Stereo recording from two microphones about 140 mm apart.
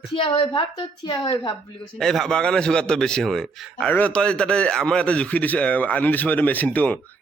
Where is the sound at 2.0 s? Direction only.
5° left (ahead or behind).